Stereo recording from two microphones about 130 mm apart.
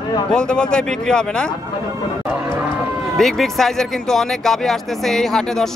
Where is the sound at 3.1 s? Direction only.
Centre (ahead or behind).